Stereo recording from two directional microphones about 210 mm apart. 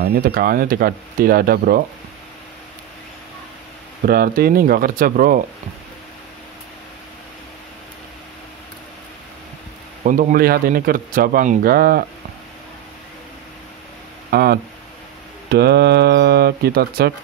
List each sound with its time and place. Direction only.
0.0 s speech: 50° right (ahead or behind)
4.0 s speech: 45° right (ahead or behind)
10.0 s speech: 40° right (ahead or behind)
14.3 s speech: 50° right (ahead or behind)